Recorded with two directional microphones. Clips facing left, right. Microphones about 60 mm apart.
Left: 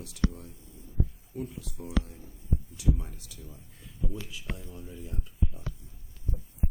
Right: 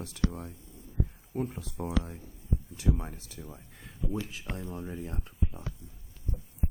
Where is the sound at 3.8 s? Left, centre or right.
Right.